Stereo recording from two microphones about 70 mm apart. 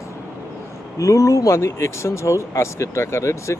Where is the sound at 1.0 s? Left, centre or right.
Left.